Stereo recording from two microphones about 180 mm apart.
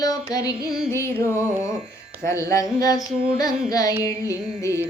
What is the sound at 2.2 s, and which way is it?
Child singing, 15° left (ahead or behind).